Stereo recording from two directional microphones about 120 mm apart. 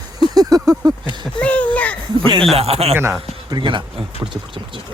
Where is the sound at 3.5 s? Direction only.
40° right (ahead or behind).